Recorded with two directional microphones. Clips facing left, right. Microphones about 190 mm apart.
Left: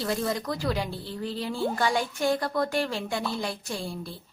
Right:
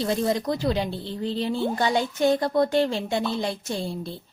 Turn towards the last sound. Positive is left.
turn(degrees=-25)  # may be behind; listen again after turning